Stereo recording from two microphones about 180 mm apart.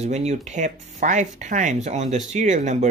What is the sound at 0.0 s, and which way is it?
Speech, 40° right (ahead or behind).